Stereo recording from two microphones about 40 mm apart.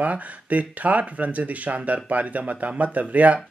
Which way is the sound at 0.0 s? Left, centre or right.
Right.